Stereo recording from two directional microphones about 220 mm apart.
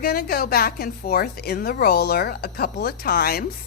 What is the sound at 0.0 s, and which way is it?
A woman's voice, 45° left (ahead or behind).